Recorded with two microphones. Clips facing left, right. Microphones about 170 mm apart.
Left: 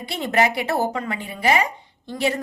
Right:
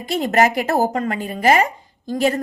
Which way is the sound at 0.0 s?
45° right (ahead or behind).